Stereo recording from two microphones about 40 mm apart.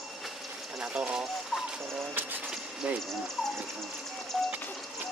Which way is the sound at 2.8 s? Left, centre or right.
Right.